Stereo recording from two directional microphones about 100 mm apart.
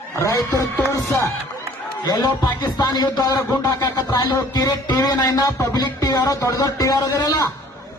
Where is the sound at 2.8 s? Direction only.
45° left (ahead or behind).